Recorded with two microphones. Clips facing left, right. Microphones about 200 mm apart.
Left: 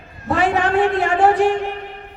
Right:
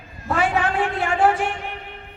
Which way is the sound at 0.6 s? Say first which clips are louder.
Left 6 dB; 40° left (ahead or behind).